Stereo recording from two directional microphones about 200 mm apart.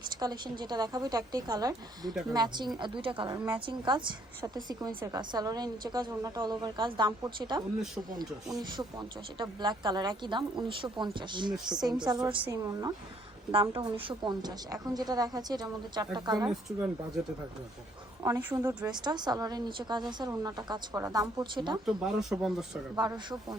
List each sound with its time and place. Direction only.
0.2 s a woman's voice: 20° right (ahead or behind)
18.2 s a woman's voice: 10° right (ahead or behind)
18.9 s speech: 20° right (ahead or behind)
21.8 s speech: centre (ahead or behind)
23.0 s speech: 20° right (ahead or behind)